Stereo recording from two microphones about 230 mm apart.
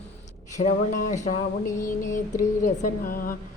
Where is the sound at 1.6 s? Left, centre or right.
Centre.